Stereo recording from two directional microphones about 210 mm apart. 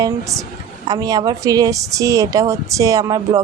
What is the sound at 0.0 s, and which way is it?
A woman's voice, 15° right (ahead or behind).